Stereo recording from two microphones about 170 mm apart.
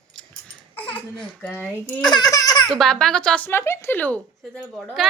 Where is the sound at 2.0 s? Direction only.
25° left (ahead or behind).